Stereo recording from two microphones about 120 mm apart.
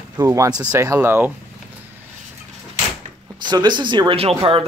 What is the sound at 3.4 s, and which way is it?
Speech, 35° right (ahead or behind).